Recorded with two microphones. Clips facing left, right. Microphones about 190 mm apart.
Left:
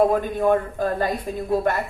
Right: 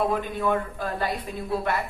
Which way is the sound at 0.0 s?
45° left (ahead or behind).